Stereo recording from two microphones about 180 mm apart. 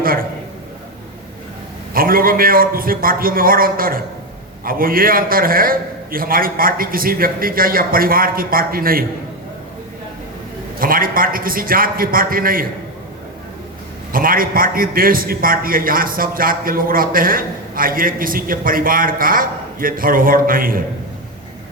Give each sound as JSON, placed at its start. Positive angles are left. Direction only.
{"t": 0.0, "sound": "a sound", "side_deg": -55}
{"t": 1.9, "sound": "a man's voice", "side_deg": -55}
{"t": 10.8, "sound": "a man's voice", "side_deg": -50}
{"t": 14.1, "sound": "a man's voice", "side_deg": -50}